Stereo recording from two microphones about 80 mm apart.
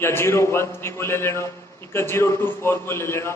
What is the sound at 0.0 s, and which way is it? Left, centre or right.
A man's voice, left.